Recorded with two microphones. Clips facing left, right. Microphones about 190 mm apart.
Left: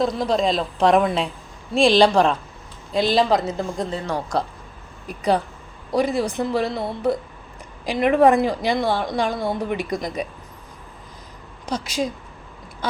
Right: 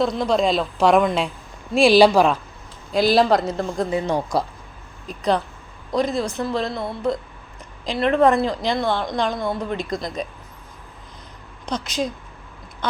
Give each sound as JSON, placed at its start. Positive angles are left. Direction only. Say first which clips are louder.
{"t": 0.0, "sound": "a woman's voice", "louder": "right 1 dB", "side_deg": 0}
{"t": 3.9, "sound": "speech", "louder": "right 7 dB", "side_deg": -20}
{"t": 5.0, "sound": "a woman's voice", "louder": "left 1 dB", "side_deg": 10}
{"t": 11.6, "sound": "speech", "louder": "even", "side_deg": 10}